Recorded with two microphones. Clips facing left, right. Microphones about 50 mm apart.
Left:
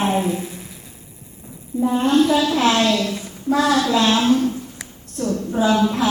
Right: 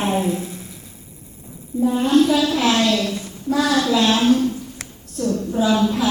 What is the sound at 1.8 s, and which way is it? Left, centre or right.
A woman's voice, centre.